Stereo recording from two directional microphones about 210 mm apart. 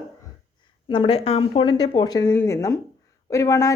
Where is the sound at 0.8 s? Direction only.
25° left (ahead or behind).